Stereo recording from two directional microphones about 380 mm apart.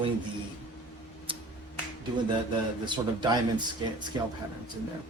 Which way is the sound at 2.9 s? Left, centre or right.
Centre.